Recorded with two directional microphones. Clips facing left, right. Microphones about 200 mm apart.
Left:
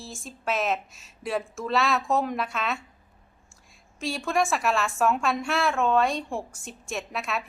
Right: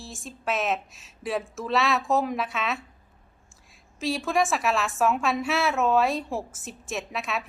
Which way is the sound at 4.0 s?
Centre (ahead or behind).